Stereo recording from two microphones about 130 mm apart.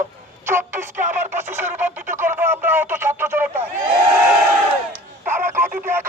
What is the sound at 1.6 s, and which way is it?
Radio, 15° right (ahead or behind).